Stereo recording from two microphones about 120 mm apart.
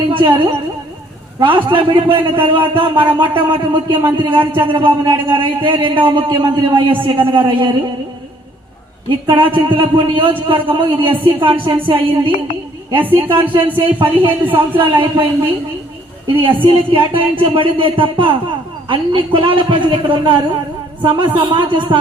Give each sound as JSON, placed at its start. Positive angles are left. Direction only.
{"t": 0.1, "sound": "a woman's voice", "side_deg": -45}
{"t": 9.0, "sound": "a man's voice", "side_deg": -45}
{"t": 13.3, "sound": "a man's voice", "side_deg": -45}
{"t": 16.4, "sound": "a man's voice", "side_deg": -45}